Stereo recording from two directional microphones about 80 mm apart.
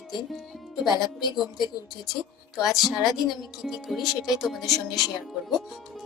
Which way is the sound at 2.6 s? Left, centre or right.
Centre.